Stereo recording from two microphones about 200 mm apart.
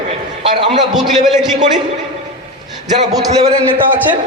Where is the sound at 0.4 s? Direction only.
25° right (ahead or behind).